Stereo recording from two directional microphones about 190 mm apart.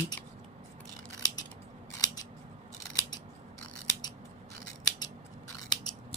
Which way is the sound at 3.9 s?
20° left (ahead or behind).